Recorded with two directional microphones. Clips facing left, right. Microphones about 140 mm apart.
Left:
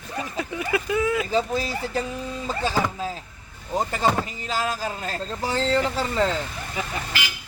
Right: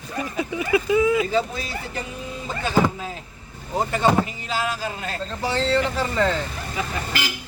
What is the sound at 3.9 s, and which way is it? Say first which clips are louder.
Speech: right 6 dB; 40° left (ahead or behind).